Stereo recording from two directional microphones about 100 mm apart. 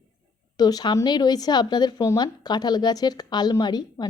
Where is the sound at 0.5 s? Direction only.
40° left (ahead or behind).